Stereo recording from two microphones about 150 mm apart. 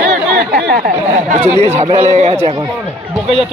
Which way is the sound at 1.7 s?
45° right (ahead or behind).